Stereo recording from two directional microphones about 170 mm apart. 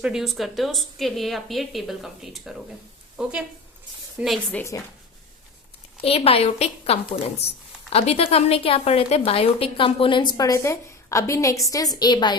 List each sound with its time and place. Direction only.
0.0 s a woman's voice: 5° right (ahead or behind)
4.5 s a woman's voice: 15° left (ahead or behind)
6.0 s a woman's voice: 35° left (ahead or behind)